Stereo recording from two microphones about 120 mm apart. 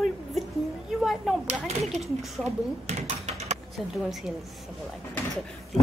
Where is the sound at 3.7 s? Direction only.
Centre (ahead or behind).